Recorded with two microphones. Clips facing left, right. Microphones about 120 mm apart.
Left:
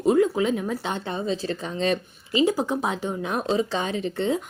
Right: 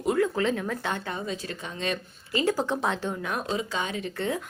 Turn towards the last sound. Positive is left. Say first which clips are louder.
# left 5 dB
turn(degrees=25)  # may be behind; listen again after turning